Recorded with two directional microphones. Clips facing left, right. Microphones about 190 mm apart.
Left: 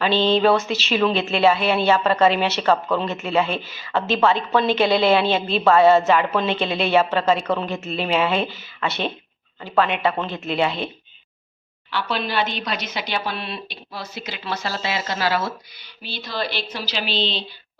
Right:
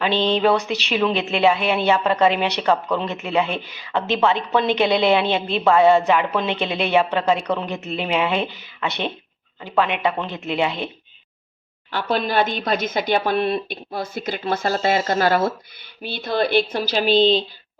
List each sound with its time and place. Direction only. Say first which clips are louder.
0.0 s speech: left 1 dB; 15° right (ahead or behind)
11.9 s speech: right 3 dB; 45° right (ahead or behind)